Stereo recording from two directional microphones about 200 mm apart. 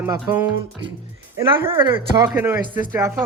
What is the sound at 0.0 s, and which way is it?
Speech, 15° right (ahead or behind).